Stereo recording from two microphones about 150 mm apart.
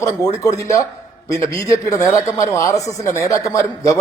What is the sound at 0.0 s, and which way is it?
A man's voice, 20° left (ahead or behind).